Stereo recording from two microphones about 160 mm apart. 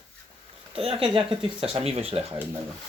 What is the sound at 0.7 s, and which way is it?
Speech, 35° right (ahead or behind).